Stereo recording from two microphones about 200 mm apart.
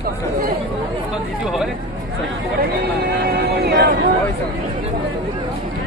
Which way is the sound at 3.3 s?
55° right (ahead or behind).